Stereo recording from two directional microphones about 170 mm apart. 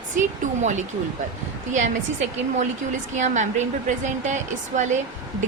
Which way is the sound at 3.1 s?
45° right (ahead or behind).